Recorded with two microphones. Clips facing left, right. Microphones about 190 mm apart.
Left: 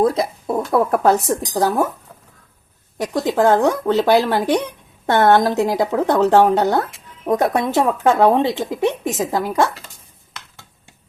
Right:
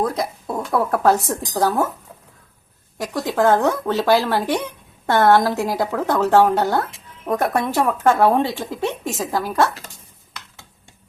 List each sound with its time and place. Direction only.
0.0 s speech: 25° left (ahead or behind)
3.0 s speech: 20° left (ahead or behind)